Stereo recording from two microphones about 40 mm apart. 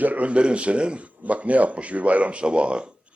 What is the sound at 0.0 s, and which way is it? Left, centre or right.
A man's voice, right.